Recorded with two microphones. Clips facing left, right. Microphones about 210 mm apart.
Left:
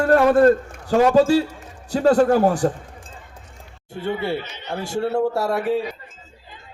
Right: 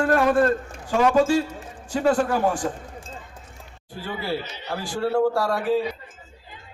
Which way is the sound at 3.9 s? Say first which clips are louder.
Left 5 dB; 25° left (ahead or behind).